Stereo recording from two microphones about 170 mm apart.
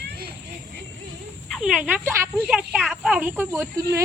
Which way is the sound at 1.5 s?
5° right (ahead or behind).